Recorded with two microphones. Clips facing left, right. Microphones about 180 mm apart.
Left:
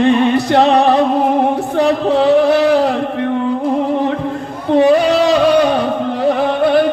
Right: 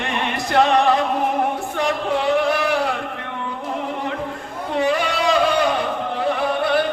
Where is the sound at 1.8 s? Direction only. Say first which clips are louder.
Left 8 dB; 35° left (ahead or behind).